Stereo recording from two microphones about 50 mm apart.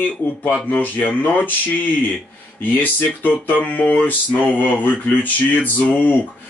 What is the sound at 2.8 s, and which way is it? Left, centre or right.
Speech, left.